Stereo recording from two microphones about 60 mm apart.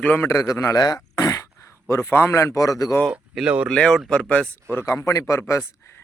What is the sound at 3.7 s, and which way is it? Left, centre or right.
Speech, centre.